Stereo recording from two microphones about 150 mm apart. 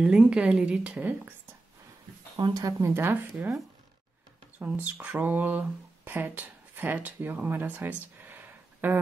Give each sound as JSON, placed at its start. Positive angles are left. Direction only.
{"t": 0.0, "sound": "a woman's voice", "side_deg": -5}
{"t": 2.3, "sound": "a woman's voice", "side_deg": -30}
{"t": 4.6, "sound": "speech", "side_deg": -10}